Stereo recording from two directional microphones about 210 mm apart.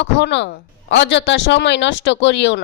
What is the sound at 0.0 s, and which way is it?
Speech, 55° left (ahead or behind).